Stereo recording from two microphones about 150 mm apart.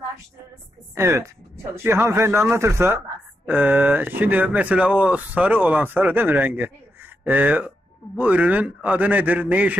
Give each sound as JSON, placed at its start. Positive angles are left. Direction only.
{"t": 0.9, "sound": "speech", "side_deg": -20}